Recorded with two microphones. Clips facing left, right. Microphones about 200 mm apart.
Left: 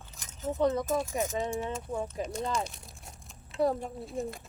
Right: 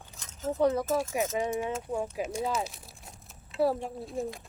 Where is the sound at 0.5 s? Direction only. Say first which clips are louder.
Right 2 dB; 10° right (ahead or behind).